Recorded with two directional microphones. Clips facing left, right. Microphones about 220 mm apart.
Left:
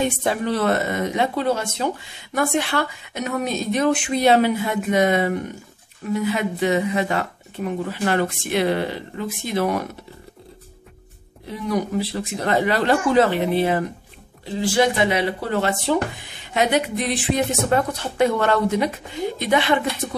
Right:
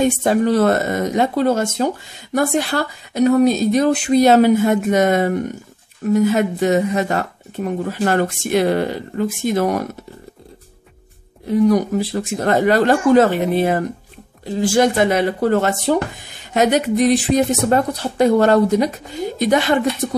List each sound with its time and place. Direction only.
0.2 s a woman's voice: 45° right (ahead or behind)
11.4 s a woman's voice: 45° right (ahead or behind)